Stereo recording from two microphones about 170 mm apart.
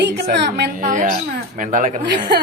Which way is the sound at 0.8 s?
50° right (ahead or behind).